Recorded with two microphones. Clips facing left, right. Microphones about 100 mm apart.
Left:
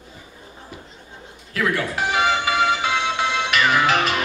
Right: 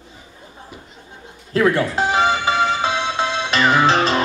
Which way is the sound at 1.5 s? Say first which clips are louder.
Right 6 dB; 30° right (ahead or behind).